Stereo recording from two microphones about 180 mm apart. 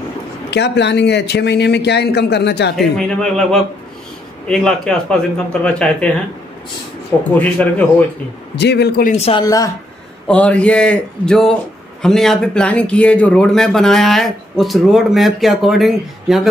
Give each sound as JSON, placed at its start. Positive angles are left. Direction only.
{"t": 0.5, "sound": "speech", "side_deg": 70}
{"t": 2.7, "sound": "speech", "side_deg": 5}
{"t": 7.3, "sound": "a man's voice", "side_deg": 10}
{"t": 8.5, "sound": "speech", "side_deg": 70}
{"t": 9.1, "sound": "speech", "side_deg": 35}
{"t": 9.4, "sound": "speech", "side_deg": 20}
{"t": 10.2, "sound": "speech", "side_deg": 5}